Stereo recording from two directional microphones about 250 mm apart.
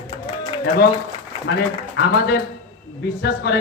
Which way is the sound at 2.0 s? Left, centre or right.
Left.